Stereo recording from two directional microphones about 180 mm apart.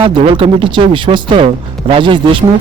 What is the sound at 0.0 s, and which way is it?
Speech, 30° right (ahead or behind).